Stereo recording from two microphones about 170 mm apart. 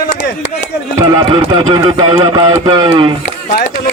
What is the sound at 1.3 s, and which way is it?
Speech, 25° right (ahead or behind).